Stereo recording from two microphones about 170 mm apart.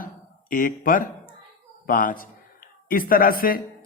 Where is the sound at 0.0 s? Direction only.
55° left (ahead or behind).